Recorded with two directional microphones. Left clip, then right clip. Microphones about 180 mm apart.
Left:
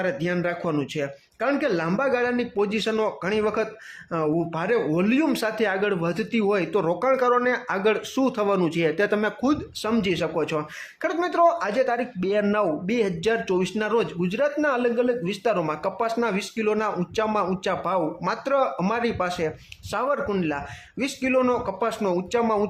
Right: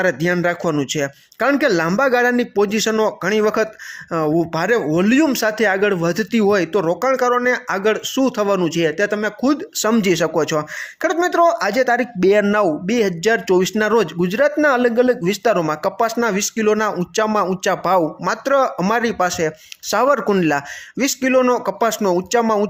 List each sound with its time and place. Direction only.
0.0 s speech: 30° right (ahead or behind)
9.7 s speech: 35° right (ahead or behind)